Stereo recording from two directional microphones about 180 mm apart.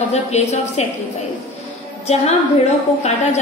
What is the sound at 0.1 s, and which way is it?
Speech, 40° left (ahead or behind).